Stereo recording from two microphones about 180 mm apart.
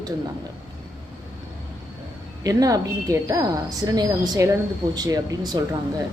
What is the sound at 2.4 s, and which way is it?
Speech, 20° right (ahead or behind).